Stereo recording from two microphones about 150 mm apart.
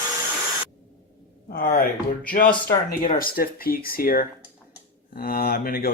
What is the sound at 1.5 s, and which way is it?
Speech, 75° left (ahead or behind).